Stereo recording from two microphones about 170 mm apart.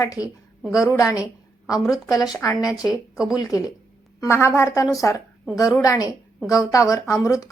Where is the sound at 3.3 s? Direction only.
20° left (ahead or behind).